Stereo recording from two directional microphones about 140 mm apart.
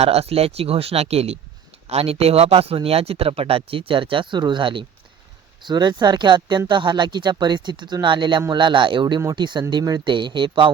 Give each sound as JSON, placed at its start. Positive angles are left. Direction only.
{"t": 0.0, "sound": "speech", "side_deg": -45}